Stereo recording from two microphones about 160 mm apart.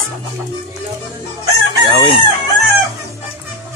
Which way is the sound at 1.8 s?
30° right (ahead or behind).